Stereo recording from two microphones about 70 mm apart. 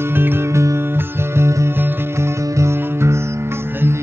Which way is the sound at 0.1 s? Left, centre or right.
Right.